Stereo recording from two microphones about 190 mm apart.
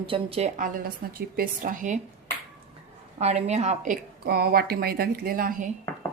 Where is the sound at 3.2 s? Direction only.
35° right (ahead or behind).